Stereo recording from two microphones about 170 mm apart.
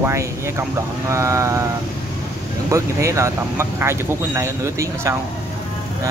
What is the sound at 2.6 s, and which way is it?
Speech, 15° right (ahead or behind).